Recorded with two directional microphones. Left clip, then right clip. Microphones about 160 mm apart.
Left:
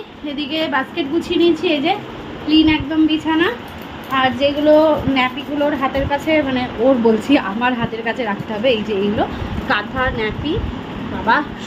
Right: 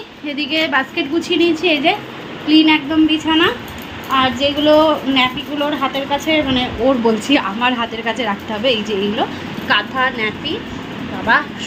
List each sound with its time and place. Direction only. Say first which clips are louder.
0.3 s a woman's voice: right 3 dB; 15° right (ahead or behind)
1.6 s a woman's voice: right 3 dB; 25° right (ahead or behind)
4.1 s speech: right 1 dB; centre (ahead or behind)